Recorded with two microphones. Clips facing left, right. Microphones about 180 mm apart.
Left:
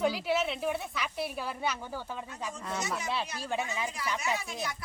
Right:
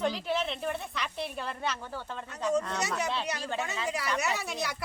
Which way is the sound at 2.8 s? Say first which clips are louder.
Right 2 dB; 70° right (ahead or behind).